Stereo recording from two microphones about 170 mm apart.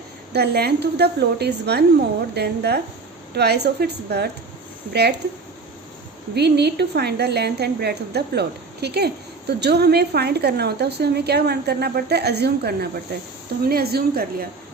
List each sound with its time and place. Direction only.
0.3 s a woman's voice: 70° right (ahead or behind)
6.3 s a woman's voice: 75° right (ahead or behind)